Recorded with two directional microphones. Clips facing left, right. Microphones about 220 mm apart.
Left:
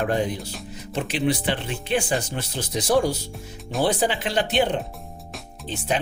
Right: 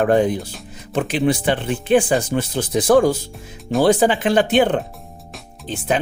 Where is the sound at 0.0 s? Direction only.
50° right (ahead or behind).